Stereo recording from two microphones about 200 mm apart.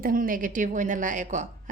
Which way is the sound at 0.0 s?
45° right (ahead or behind).